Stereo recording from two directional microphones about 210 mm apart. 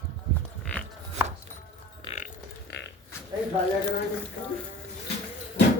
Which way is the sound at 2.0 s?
35° left (ahead or behind).